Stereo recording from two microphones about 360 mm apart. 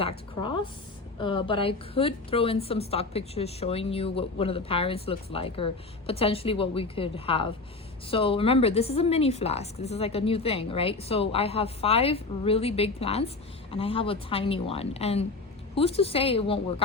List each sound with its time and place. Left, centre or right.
0.0 s a woman's voice: centre